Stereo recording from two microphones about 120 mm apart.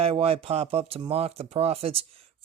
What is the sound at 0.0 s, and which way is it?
Speech, 55° right (ahead or behind).